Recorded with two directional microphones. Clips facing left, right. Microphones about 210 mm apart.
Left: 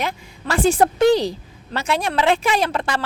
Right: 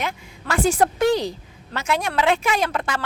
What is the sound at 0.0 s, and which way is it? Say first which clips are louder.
Speech: left 3 dB; 35° left (ahead or behind).